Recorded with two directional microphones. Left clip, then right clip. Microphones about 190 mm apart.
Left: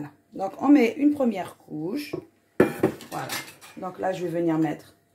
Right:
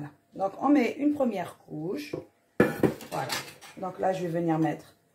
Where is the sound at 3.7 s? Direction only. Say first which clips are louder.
Even; 40° left (ahead or behind).